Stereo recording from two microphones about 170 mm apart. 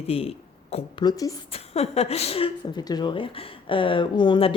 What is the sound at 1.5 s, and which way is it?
Speech, 35° left (ahead or behind).